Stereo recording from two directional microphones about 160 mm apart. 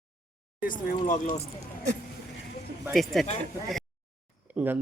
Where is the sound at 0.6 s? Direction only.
60° left (ahead or behind).